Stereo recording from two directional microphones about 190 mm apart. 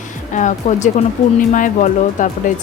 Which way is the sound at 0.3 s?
40° left (ahead or behind).